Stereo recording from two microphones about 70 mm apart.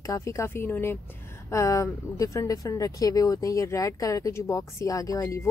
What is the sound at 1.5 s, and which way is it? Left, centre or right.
Speech, left.